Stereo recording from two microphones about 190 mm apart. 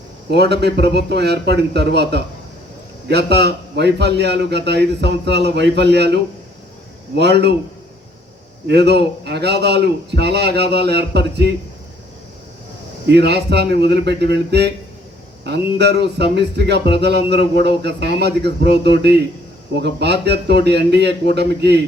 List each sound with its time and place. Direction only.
0.3 s a man's voice: 60° right (ahead or behind)
7.2 s a man's voice: 60° right (ahead or behind)
8.6 s a man's voice: 65° right (ahead or behind)
13.1 s a man's voice: 60° right (ahead or behind)